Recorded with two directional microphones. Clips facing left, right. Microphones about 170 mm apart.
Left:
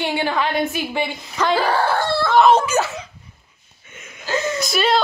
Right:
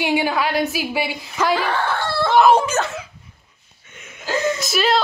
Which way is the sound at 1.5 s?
35° left (ahead or behind).